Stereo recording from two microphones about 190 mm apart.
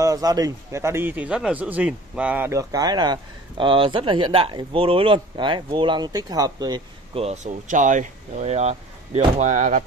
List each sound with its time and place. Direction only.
0.0 s a man's voice: 20° right (ahead or behind); by 9.8 s 40° right (ahead or behind)